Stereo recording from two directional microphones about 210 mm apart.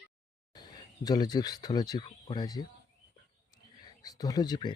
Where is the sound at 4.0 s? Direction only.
15° left (ahead or behind).